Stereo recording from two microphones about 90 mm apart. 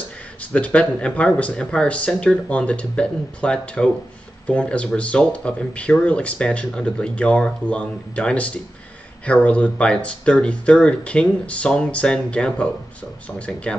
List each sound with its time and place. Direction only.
0.4 s speech: 15° left (ahead or behind)